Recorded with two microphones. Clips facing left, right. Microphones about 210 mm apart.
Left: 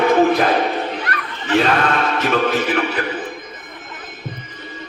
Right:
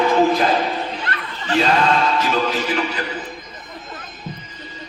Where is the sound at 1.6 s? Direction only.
60° left (ahead or behind).